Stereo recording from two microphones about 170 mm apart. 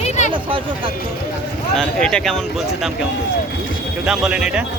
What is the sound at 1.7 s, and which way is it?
Speech, 5° left (ahead or behind).